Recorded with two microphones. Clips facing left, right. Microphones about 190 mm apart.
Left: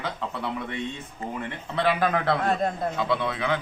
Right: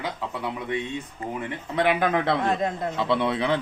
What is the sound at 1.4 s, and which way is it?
Speech, 15° right (ahead or behind).